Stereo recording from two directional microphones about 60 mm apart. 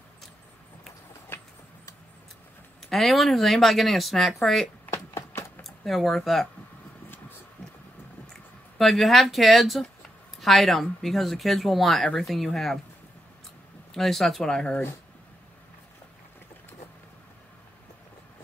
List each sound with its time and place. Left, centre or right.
2.8 s speech: centre
4.9 s a sound: left
5.6 s speech: centre
8.3 s speech: centre
13.9 s speech: centre